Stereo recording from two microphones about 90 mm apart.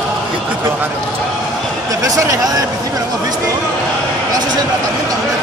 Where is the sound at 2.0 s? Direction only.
40° right (ahead or behind).